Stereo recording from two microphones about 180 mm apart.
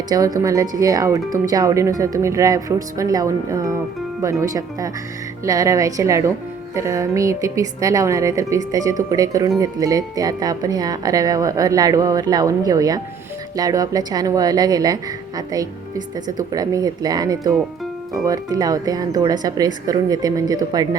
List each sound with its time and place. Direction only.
0.1 s a woman's voice: 20° right (ahead or behind)